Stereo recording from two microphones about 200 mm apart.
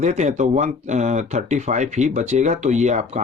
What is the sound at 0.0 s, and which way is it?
Speech, 35° right (ahead or behind).